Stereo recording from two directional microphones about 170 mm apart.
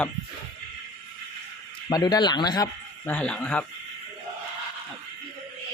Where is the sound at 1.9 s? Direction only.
25° left (ahead or behind).